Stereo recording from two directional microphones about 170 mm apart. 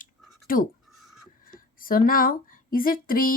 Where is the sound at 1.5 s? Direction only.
55° left (ahead or behind).